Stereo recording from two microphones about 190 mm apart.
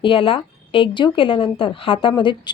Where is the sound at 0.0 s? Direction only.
30° left (ahead or behind).